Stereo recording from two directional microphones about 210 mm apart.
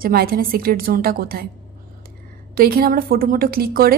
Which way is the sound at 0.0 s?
45° right (ahead or behind).